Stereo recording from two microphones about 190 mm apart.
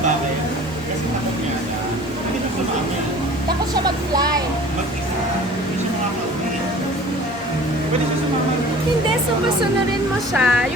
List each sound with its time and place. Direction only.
3.8 s vehicle: 20° right (ahead or behind)
10.3 s speech: 5° right (ahead or behind)